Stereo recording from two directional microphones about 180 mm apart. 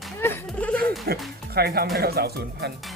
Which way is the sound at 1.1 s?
60° right (ahead or behind).